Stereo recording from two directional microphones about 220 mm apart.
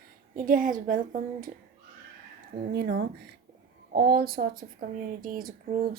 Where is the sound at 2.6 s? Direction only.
45° right (ahead or behind).